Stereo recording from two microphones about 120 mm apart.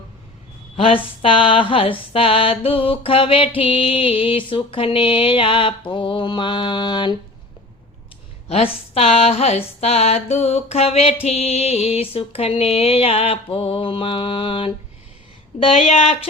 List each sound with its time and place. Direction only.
1.2 s a sound: 50° left (ahead or behind)
8.4 s speech: 60° left (ahead or behind)
15.6 s speech: 55° left (ahead or behind)